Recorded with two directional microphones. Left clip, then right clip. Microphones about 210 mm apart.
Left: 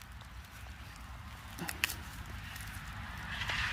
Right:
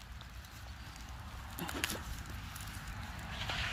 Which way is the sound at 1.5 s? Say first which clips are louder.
Left 3 dB; 15° left (ahead or behind).